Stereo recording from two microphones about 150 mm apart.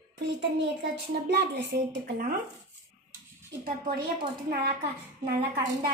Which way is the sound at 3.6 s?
80° right.